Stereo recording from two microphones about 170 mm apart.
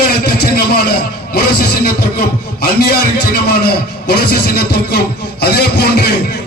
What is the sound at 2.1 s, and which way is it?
Speech, 60° left (ahead or behind).